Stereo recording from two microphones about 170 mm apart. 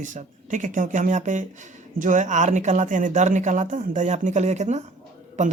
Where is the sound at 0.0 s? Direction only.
50° right (ahead or behind).